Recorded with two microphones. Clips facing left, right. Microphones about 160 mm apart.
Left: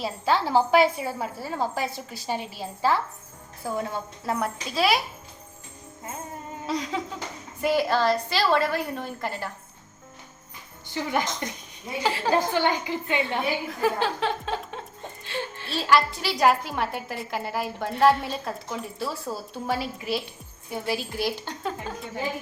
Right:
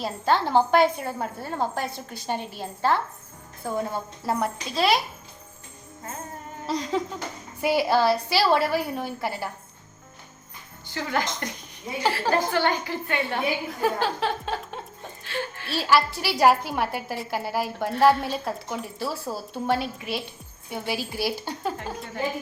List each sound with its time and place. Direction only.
0.0 s a woman's voice: centre (ahead or behind)
6.7 s a woman's voice: centre (ahead or behind)
7.6 s a woman's voice: 10° right (ahead or behind)
10.9 s a woman's voice: 15° left (ahead or behind)
11.9 s a woman's voice: centre (ahead or behind)
12.3 s a woman's voice: 20° left (ahead or behind)
13.7 s a woman's voice: centre (ahead or behind)
15.2 s music: 25° left (ahead or behind)
15.7 s a woman's voice: 5° right (ahead or behind)